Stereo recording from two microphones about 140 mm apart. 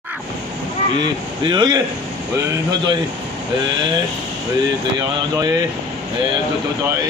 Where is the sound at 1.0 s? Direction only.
30° right (ahead or behind).